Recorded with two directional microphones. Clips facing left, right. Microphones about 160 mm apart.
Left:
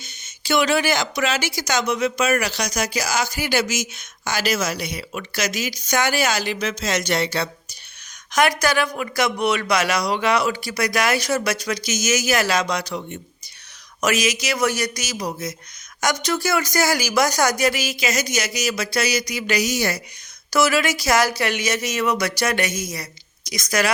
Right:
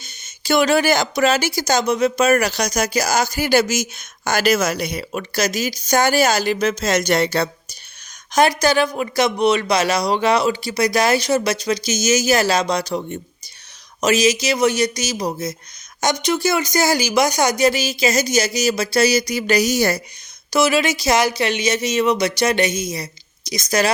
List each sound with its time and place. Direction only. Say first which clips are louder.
0.0 s speech: right 2 dB; 40° right (ahead or behind)
8.3 s speech: right 3 dB; 30° right (ahead or behind)
20.5 s speech: right 2 dB; 20° right (ahead or behind)